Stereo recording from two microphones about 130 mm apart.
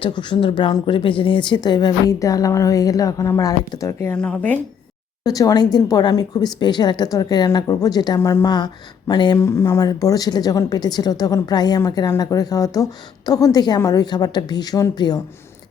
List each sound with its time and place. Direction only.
0.0 s a woman's voice: 40° left (ahead or behind); by 4.2 s 20° left (ahead or behind)
4.2 s speech: 10° left (ahead or behind)
5.2 s speech: 25° left (ahead or behind)
8.5 s speech: 35° left (ahead or behind)
9.4 s a woman's voice: 20° left (ahead or behind)